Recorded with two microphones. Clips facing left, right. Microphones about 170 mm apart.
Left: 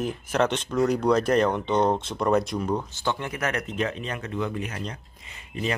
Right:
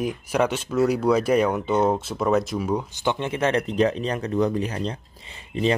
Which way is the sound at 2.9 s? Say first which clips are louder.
Right 4 dB; 15° right (ahead or behind).